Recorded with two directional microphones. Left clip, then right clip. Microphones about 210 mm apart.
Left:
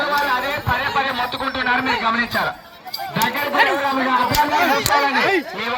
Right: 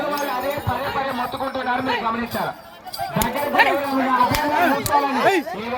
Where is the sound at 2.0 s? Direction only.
15° left (ahead or behind).